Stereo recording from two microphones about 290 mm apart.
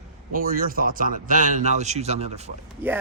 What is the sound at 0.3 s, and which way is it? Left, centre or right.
Speech, right.